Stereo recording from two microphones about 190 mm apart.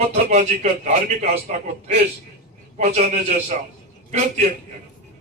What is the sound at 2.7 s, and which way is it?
Speech, 35° right (ahead or behind).